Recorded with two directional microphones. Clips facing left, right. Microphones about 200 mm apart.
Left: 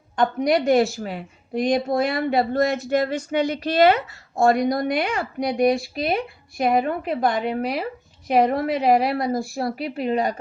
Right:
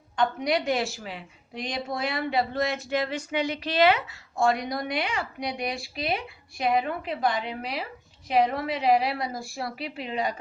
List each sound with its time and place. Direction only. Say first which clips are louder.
0.2 s a woman's voice: left 6 dB; 45° left (ahead or behind)